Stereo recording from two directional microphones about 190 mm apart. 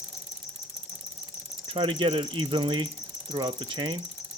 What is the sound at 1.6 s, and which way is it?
Mechanisms, 30° right (ahead or behind).